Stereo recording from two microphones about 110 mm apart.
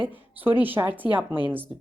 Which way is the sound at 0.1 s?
15° right (ahead or behind).